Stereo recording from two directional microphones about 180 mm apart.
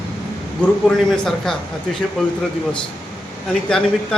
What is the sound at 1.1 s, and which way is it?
Speech, centre (ahead or behind).